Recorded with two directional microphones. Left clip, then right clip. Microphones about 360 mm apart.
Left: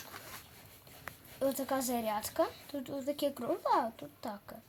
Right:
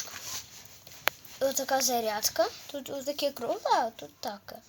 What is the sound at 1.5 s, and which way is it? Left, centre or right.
Speech, right.